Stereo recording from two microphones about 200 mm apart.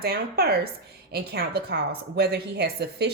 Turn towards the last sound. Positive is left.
turn(degrees=-55)  # may be behind; listen again after turning